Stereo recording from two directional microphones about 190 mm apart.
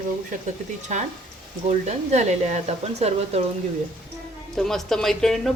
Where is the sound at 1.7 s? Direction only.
35° right (ahead or behind).